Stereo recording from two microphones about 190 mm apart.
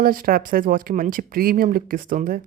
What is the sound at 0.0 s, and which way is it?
Speech, 50° right (ahead or behind).